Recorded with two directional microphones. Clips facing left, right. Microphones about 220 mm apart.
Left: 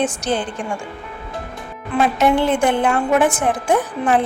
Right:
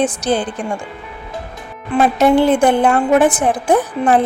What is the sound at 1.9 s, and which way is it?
A woman's voice, 35° right (ahead or behind).